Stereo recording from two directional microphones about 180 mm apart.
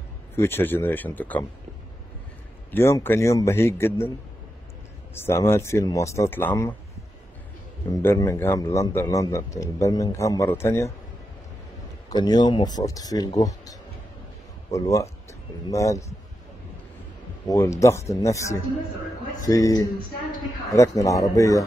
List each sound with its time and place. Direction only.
0.4 s speech: 10° left (ahead or behind)
2.7 s speech: 15° left (ahead or behind)
5.1 s speech: 15° left (ahead or behind)
7.9 s speech: 15° left (ahead or behind)
12.1 s speech: 25° left (ahead or behind)
17.5 s speech: 15° left (ahead or behind)